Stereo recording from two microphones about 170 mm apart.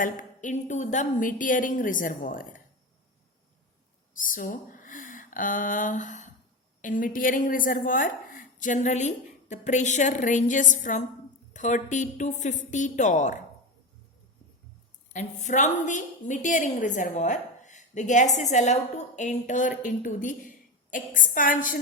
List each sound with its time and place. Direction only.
0.0 s a woman's voice: 50° left (ahead or behind)
4.2 s a woman's voice: 55° left (ahead or behind)
15.1 s a woman's voice: 45° left (ahead or behind)